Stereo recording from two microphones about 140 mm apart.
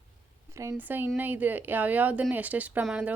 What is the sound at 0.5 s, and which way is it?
A woman's voice, 20° right (ahead or behind).